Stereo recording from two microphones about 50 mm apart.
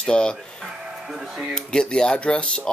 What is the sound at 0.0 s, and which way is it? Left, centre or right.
Speech, centre.